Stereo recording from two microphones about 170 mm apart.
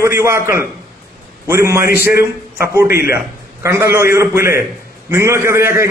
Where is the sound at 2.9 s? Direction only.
65° left (ahead or behind).